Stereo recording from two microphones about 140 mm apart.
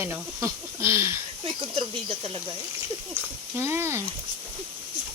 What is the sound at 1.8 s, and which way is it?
Speech, 45° right (ahead or behind).